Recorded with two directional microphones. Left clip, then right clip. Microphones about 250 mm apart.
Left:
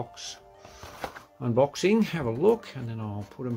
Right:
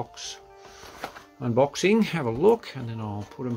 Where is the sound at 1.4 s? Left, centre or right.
Centre.